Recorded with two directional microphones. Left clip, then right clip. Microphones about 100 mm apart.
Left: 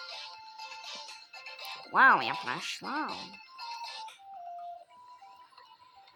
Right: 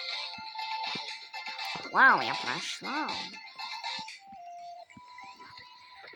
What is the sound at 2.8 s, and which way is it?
Speech, 20° right (ahead or behind).